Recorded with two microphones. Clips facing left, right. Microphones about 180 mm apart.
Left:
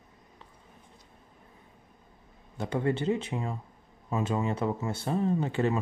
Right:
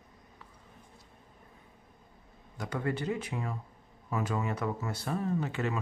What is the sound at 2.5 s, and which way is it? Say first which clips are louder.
Speech: left 5 dB; 25° left (ahead or behind).